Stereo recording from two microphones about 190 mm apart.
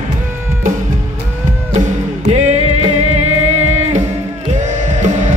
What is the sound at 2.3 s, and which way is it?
Music, 35° right (ahead or behind).